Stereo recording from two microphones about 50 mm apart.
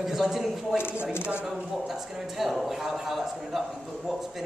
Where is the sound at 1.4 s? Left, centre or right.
Centre.